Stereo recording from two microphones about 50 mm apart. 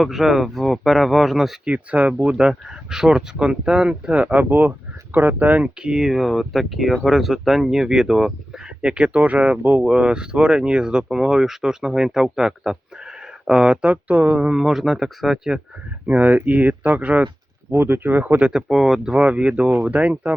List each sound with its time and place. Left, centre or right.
0.0 s speech: centre
1.6 s speech: right
5.6 s speech: centre
13.8 s speech: right
14.6 s speech: centre
16.0 s speech: right
17.7 s speech: right
18.7 s speech: centre
19.1 s speech: right